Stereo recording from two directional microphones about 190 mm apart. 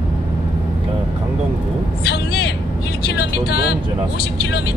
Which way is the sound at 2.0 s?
60° left (ahead or behind).